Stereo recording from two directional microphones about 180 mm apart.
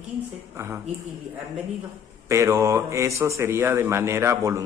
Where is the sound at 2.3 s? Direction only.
15° right (ahead or behind).